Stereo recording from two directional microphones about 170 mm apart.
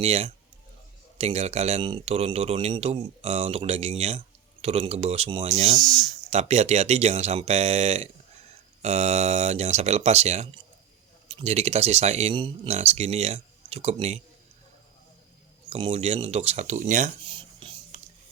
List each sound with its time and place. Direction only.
0.0 s a man's voice: 40° right (ahead or behind)
15.7 s a man's voice: 35° right (ahead or behind)
17.2 s whispering: 30° right (ahead or behind)